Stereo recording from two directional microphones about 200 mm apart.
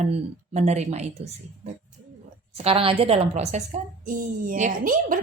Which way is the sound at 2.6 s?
30° right (ahead or behind).